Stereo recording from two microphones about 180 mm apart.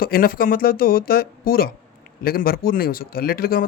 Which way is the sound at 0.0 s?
55° left (ahead or behind).